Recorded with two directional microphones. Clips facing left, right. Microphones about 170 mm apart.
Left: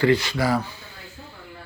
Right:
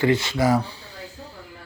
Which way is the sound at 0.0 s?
20° right (ahead or behind).